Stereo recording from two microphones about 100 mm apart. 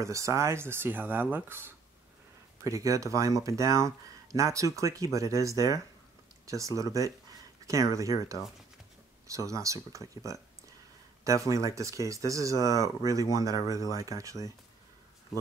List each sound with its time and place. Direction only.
0.0 s speech: 30° right (ahead or behind)
2.6 s speech: 35° right (ahead or behind)